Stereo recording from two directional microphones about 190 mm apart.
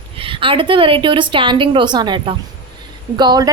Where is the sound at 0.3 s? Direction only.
30° right (ahead or behind).